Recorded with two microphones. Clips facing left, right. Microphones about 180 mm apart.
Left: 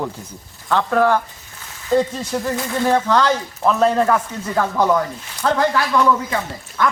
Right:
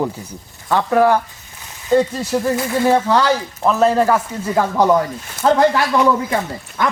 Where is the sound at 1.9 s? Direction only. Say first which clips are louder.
Right 3 dB; centre (ahead or behind).